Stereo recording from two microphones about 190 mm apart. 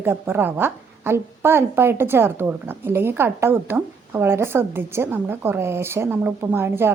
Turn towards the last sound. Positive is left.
turn(degrees=-10)  # may be behind; listen again after turning